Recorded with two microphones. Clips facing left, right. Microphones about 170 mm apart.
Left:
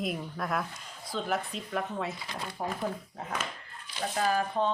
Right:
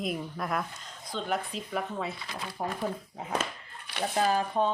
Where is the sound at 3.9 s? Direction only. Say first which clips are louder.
Right 4 dB; 65° right (ahead or behind).